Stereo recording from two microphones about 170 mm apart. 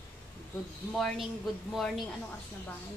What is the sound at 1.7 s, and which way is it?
Speech, centre (ahead or behind).